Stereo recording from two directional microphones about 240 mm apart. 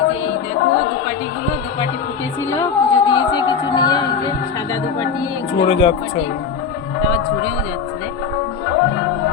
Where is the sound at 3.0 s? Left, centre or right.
Centre.